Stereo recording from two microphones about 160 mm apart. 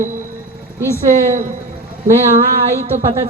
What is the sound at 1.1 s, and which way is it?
Speech, 50° right (ahead or behind).